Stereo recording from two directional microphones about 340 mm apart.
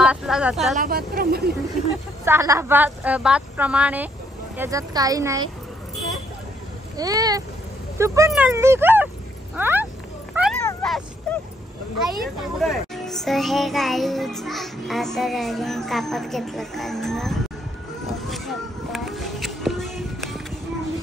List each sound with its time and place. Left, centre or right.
0.0 s speech: centre
0.7 s a woman's voice: right
2.2 s a child's voice: centre
7.0 s speech: centre
10.3 s cat: centre
12.1 s a child's voice: centre
18.0 s a sound: centre